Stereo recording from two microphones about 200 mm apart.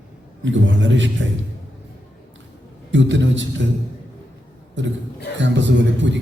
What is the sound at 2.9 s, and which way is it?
Speech, 65° right (ahead or behind).